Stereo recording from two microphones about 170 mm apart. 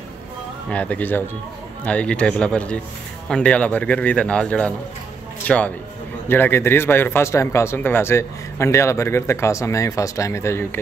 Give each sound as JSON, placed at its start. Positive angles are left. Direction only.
{"t": 0.7, "sound": "speech", "side_deg": 10}